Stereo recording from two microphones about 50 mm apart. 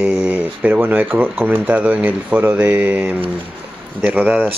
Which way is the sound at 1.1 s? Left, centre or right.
Right.